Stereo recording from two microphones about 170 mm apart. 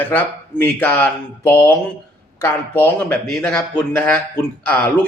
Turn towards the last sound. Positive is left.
turn(degrees=10)  # may be behind; listen again after turning